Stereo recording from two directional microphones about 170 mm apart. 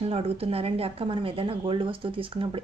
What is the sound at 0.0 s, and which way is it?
Speech, 35° right (ahead or behind).